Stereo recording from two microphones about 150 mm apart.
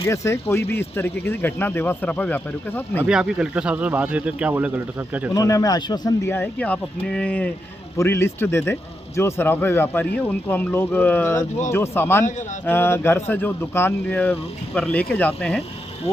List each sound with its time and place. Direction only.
0.1 s speech: 20° left (ahead or behind)
3.0 s speech: 5° right (ahead or behind)
5.3 s speech: 25° left (ahead or behind)
12.2 s a man's voice: 55° left (ahead or behind)
12.6 s speech: 15° left (ahead or behind)